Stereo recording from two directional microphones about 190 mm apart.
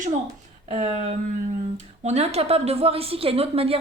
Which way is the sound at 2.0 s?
35° right (ahead or behind).